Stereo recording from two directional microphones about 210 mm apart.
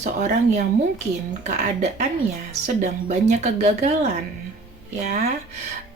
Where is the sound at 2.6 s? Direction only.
35° right (ahead or behind).